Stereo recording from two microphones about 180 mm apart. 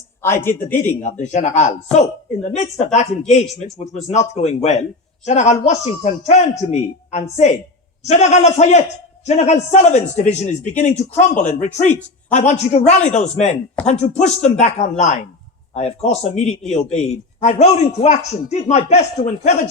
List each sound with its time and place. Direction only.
0.2 s speech: 15° left (ahead or behind)
1.2 s a man's voice: 40° left (ahead or behind)